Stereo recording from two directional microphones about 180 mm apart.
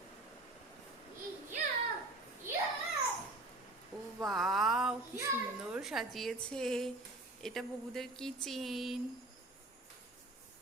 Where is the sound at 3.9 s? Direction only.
Centre (ahead or behind).